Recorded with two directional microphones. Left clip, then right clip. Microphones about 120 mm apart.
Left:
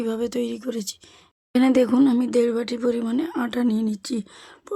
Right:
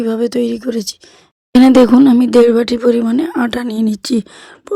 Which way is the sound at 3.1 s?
70° right (ahead or behind).